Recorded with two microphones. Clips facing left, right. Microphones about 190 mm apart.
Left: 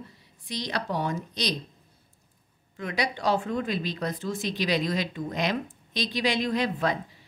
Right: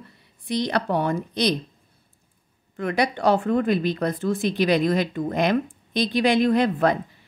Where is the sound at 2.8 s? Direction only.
55° right (ahead or behind).